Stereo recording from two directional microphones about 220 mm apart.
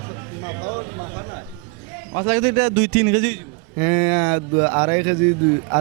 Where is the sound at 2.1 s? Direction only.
15° right (ahead or behind).